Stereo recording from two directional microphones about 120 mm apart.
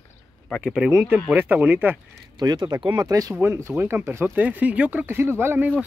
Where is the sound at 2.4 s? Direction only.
35° right (ahead or behind); by 5.7 s 20° right (ahead or behind).